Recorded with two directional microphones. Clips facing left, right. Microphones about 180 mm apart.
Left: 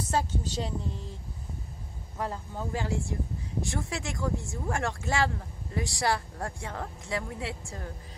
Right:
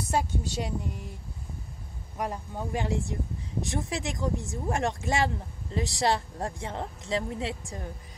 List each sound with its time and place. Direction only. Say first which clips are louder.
0.1 s a woman's voice: right 1 dB; 10° right (ahead or behind)
2.1 s a woman's voice: right 1 dB; 15° right (ahead or behind)